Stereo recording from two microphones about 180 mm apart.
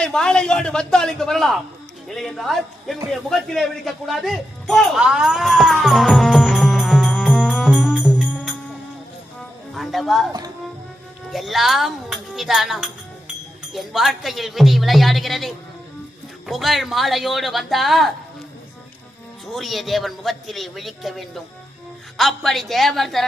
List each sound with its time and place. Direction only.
0.0 s a man's voice: 5° left (ahead or behind)
3.1 s music: centre (ahead or behind)
9.7 s speech: centre (ahead or behind)
11.3 s a man's voice: centre (ahead or behind)
19.5 s a man's voice: centre (ahead or behind)